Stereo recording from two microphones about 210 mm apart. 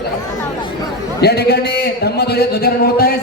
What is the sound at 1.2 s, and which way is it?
A man's voice, 50° left (ahead or behind).